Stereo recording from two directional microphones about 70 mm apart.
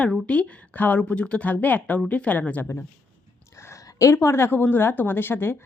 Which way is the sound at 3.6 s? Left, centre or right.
Left.